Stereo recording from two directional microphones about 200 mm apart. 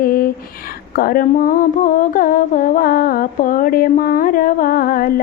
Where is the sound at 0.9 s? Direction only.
45° left (ahead or behind).